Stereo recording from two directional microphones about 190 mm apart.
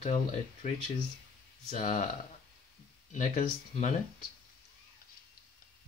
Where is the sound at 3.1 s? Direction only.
40° left (ahead or behind).